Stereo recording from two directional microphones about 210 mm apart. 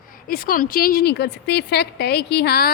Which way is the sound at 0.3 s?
45° left (ahead or behind).